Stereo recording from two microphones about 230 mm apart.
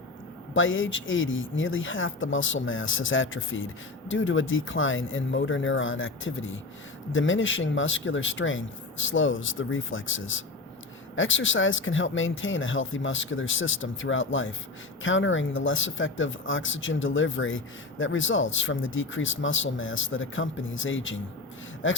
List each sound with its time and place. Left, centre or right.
0.5 s speech: left